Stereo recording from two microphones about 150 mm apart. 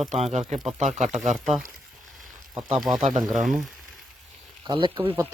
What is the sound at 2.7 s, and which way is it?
Speech, centre (ahead or behind).